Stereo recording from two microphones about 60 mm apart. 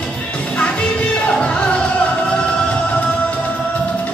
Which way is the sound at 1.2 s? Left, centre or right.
Centre.